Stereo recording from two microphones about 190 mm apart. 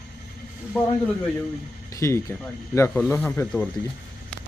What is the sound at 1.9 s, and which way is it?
Speech, 15° left (ahead or behind).